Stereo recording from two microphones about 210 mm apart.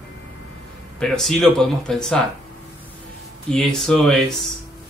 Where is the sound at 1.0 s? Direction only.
Centre (ahead or behind).